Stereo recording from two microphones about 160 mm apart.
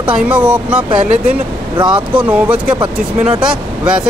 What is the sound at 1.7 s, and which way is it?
Speech, 30° right (ahead or behind).